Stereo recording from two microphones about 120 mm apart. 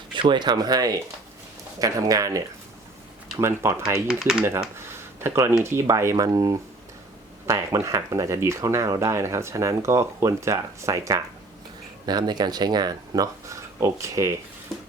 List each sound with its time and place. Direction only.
0.1 s speech: 40° right (ahead or behind); by 4.0 s 25° right (ahead or behind)
4.1 s speech: 5° right (ahead or behind)
4.4 s speech: 20° right (ahead or behind)